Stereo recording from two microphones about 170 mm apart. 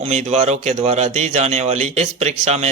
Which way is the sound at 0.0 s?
40° right (ahead or behind).